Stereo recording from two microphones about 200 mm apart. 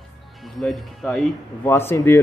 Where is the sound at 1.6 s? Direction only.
10° left (ahead or behind).